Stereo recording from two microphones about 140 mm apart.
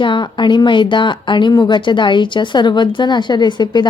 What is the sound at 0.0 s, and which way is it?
Speech, 35° left (ahead or behind).